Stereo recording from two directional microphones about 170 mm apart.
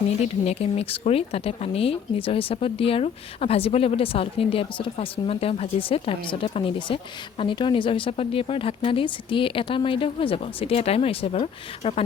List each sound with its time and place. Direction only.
0.2 s speech: 35° left (ahead or behind)